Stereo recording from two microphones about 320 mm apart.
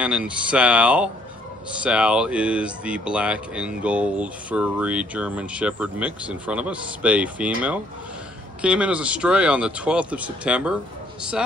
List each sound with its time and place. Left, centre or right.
0.0 s speech: centre